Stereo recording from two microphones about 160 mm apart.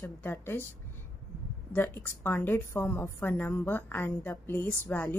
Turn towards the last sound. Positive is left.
turn(degrees=10)  # may be behind; listen again after turning